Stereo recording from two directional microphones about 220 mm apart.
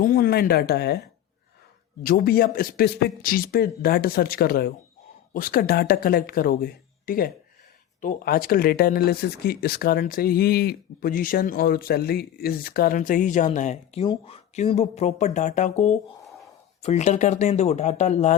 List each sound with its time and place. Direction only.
0.0 s speech: 40° left (ahead or behind)
2.0 s speech: 40° left (ahead or behind)